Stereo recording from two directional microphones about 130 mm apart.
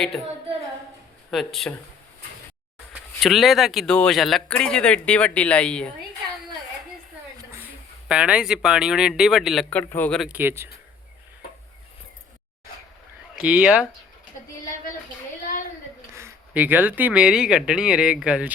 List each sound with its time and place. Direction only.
1.3 s speech: centre (ahead or behind)
3.2 s speech: centre (ahead or behind)
7.3 s a sound: 20° right (ahead or behind)
8.0 s speech: 5° right (ahead or behind)
9.6 s speech: 15° left (ahead or behind)
10.2 s speech: 10° right (ahead or behind)
13.3 s speech: 10° right (ahead or behind)
16.1 s speech: 15° right (ahead or behind)